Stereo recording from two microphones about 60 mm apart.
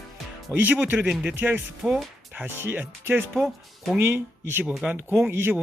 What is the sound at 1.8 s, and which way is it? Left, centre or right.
Speech, centre.